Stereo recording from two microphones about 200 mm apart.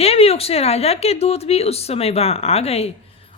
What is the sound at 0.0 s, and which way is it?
A woman's voice, 30° left (ahead or behind).